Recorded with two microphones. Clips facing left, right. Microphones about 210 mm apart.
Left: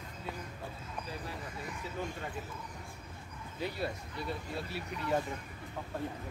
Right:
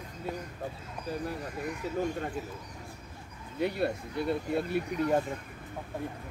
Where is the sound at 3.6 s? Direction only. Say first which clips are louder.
Right 7 dB; 60° right (ahead or behind).